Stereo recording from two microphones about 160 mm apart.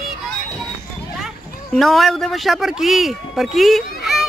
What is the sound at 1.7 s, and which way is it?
Speech, centre (ahead or behind).